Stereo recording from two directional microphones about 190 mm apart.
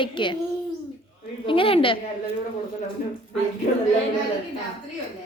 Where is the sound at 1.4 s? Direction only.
30° left (ahead or behind).